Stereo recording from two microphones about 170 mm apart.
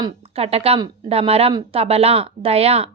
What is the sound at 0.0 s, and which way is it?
A woman's voice, 35° right (ahead or behind).